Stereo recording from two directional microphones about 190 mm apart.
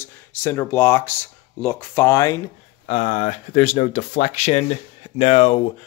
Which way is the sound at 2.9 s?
35° left (ahead or behind).